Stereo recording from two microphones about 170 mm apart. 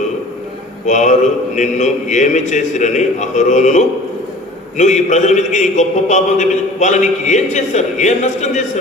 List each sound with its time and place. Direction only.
0.9 s a man's voice: 45° left (ahead or behind)